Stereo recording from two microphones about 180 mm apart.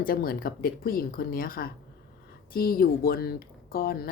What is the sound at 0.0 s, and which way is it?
A woman's voice, 55° left (ahead or behind).